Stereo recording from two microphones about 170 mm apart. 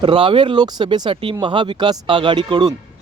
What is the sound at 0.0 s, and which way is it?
Speech, 30° right (ahead or behind).